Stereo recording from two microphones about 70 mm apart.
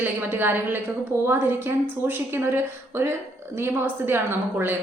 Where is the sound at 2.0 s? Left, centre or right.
Right.